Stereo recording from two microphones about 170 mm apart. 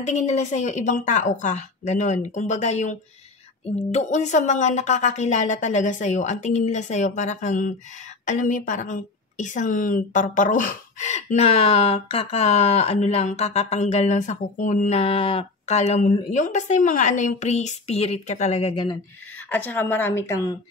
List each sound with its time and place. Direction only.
0.0 s a woman's voice: 45° left (ahead or behind)
19.5 s a woman's voice: 10° left (ahead or behind)